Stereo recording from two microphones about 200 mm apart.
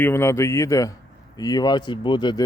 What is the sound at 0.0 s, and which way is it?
Speech, 10° left (ahead or behind).